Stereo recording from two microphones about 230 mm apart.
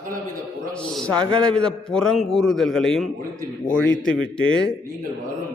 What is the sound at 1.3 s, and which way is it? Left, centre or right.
A man's voice, centre.